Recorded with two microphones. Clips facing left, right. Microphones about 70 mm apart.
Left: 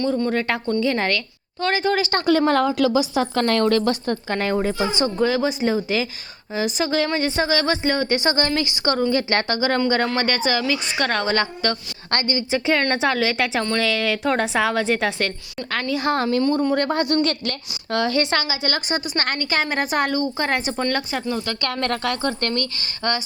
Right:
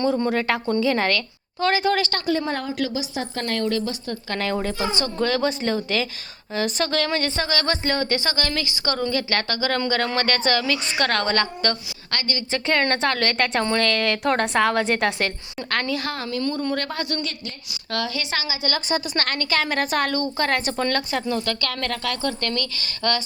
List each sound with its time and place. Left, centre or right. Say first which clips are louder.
0.3 s a woman's voice: even; centre
2.5 s a woman's voice: left 8 dB; left
4.4 s a woman's voice: left 2 dB; centre
5.2 s a woman's voice: left 1 dB; centre
12.1 s speech: left 5 dB; left
12.5 s a woman's voice: even; centre
16.1 s speech: left 7 dB; left
18.0 s a woman's voice: left 8 dB; left
19.1 s a woman's voice: left 1 dB; centre
21.6 s speech: left 3 dB; left